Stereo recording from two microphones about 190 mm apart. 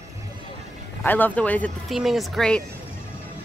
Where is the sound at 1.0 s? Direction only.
10° left (ahead or behind).